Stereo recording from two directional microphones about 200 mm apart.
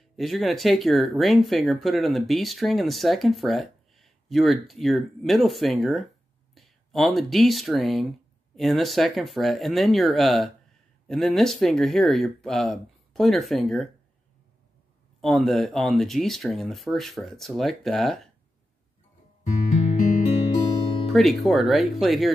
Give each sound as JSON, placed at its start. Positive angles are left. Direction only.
{"t": 0.1, "sound": "speech", "side_deg": 0}
{"t": 15.1, "sound": "speech", "side_deg": 0}
{"t": 19.8, "sound": "music", "side_deg": 40}
{"t": 21.1, "sound": "speech", "side_deg": 0}